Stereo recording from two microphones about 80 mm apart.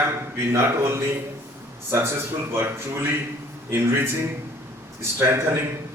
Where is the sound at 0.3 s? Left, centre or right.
Right.